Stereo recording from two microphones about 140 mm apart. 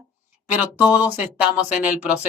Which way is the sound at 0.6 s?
10° right (ahead or behind).